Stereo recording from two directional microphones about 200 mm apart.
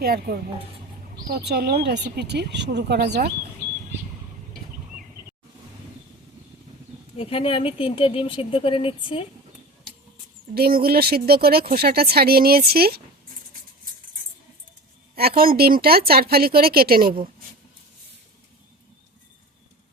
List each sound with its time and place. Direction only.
0.0 s speech: 50° right (ahead or behind)
7.2 s speech: 30° left (ahead or behind)
10.5 s speech: 50° right (ahead or behind)
15.1 s speech: 50° right (ahead or behind)